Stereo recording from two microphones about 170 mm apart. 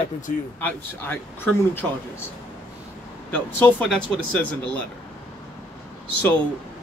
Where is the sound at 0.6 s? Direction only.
10° left (ahead or behind).